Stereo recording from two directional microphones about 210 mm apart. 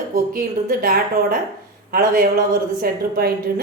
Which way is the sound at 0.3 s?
45° right (ahead or behind).